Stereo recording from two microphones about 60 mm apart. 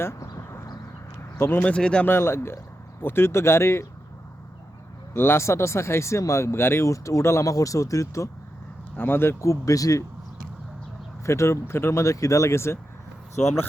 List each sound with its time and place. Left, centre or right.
0.2 s a sound: left
1.4 s speech: left
1.6 s speech: centre
2.0 s speech: left
5.1 s speech: left
6.8 s speech: left
9.0 s speech: left
9.4 s speech: left
11.3 s speech: left